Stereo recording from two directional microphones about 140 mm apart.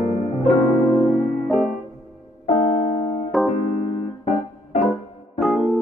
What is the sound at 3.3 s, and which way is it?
Keyboard, centre (ahead or behind).